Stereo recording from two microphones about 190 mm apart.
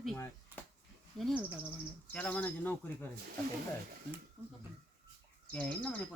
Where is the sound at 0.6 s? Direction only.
10° left (ahead or behind).